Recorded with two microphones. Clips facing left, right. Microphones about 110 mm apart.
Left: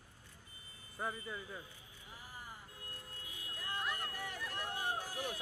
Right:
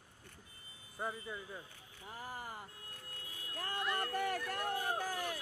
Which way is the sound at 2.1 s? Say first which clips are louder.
Right 7 dB; 75° right (ahead or behind).